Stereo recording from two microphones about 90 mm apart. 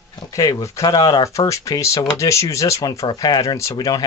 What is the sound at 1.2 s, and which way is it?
Speech, 35° left (ahead or behind).